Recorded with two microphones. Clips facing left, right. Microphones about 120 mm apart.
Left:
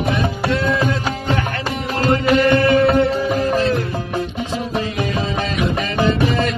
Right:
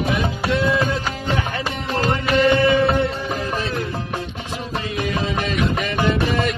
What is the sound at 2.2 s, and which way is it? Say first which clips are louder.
Music: left 1 dB; 5° right (ahead or behind).